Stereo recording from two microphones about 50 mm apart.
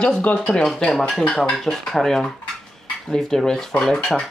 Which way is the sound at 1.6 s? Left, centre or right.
Centre.